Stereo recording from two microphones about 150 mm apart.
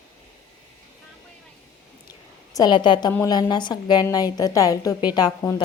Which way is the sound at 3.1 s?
20° left (ahead or behind).